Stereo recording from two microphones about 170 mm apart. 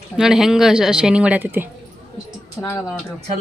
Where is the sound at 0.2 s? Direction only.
Centre (ahead or behind).